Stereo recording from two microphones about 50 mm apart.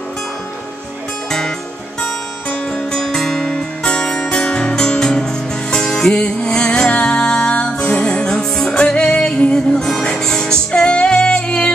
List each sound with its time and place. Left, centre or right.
2.7 s music: centre